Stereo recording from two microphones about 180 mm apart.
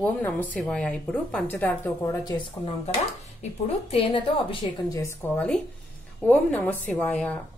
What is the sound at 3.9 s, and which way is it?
Speech, 30° left (ahead or behind).